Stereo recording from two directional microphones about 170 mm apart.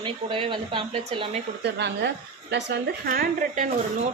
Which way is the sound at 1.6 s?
85° right.